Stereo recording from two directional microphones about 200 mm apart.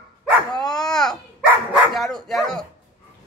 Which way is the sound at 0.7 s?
5° left (ahead or behind).